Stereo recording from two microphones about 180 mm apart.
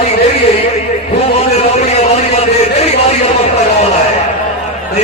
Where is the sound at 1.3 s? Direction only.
35° left (ahead or behind).